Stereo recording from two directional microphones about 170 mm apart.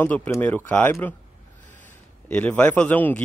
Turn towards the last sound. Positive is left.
turn(degrees=10)  # may be behind; listen again after turning